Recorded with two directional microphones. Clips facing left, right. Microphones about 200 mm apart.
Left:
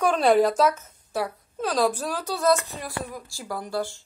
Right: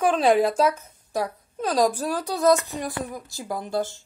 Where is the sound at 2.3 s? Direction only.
15° right (ahead or behind).